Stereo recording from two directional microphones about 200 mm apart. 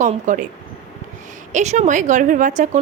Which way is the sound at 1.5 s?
35° right (ahead or behind).